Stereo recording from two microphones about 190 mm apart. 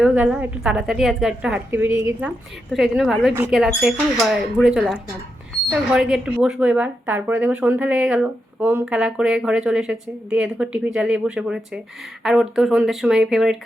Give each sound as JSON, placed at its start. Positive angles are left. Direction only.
{"t": 0.0, "sound": "a woman's voice", "side_deg": -5}